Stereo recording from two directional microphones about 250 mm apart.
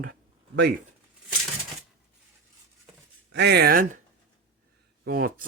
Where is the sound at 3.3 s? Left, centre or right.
Right.